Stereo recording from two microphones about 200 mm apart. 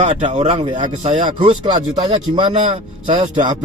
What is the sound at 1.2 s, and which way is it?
Speech, 40° right (ahead or behind).